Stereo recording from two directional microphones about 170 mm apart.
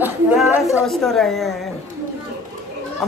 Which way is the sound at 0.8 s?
Centre (ahead or behind).